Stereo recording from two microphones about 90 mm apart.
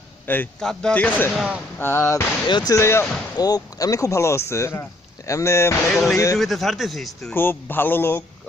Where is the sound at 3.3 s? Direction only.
45° left (ahead or behind).